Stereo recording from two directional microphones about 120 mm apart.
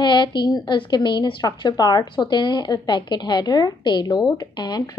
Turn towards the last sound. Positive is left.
turn(degrees=35)  # may be behind; listen again after turning